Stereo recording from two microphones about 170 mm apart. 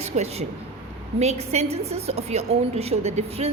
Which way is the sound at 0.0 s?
40° right (ahead or behind).